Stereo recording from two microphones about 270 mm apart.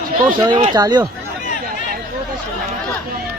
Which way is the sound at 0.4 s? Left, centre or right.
Centre.